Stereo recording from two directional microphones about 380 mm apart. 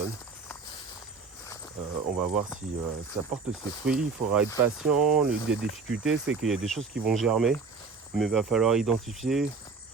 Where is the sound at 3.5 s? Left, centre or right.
Centre.